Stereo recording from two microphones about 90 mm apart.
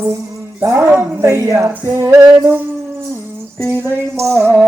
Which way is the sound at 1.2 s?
35° right (ahead or behind).